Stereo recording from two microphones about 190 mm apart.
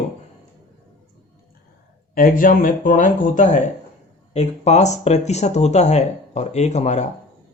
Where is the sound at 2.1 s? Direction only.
45° left (ahead or behind).